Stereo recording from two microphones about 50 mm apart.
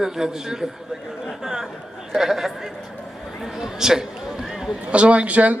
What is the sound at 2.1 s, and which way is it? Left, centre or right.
Speech, centre.